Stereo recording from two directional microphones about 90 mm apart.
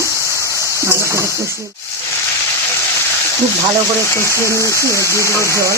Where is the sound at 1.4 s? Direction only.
35° right (ahead or behind).